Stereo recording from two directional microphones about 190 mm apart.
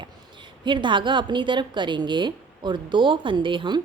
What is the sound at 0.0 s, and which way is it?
A woman's voice, 25° right (ahead or behind).